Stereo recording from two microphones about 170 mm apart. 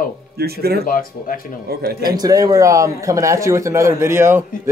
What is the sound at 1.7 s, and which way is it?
Speech, 65° right (ahead or behind).